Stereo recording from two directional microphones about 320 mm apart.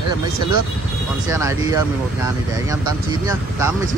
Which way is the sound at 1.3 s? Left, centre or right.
Centre.